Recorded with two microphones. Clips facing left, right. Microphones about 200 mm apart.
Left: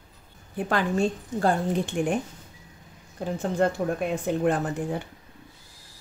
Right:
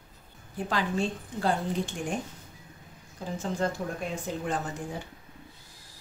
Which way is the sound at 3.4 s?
60° left (ahead or behind).